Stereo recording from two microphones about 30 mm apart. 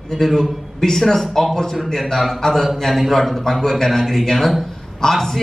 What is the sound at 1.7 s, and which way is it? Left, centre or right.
A man's voice, centre.